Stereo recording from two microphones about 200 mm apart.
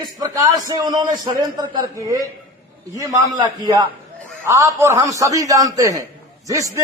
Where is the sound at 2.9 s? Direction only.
15° right (ahead or behind).